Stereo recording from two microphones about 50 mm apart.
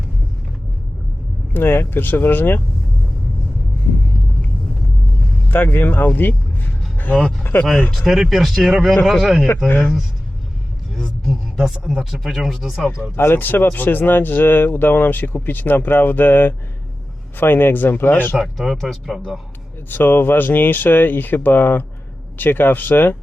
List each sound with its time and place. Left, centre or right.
1.5 s speech: left
5.5 s speech: left
7.5 s speech: left
8.0 s a man's voice: centre
9.6 s speech: left
10.9 s a sound: centre
11.6 s speech: centre
13.0 s speech: left
18.3 s speech: centre
19.9 s speech: left